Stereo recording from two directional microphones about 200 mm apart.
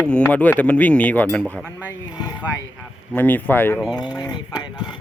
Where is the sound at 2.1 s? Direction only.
20° left (ahead or behind).